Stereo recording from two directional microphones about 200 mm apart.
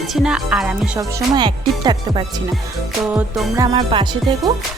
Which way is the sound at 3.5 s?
20° right (ahead or behind).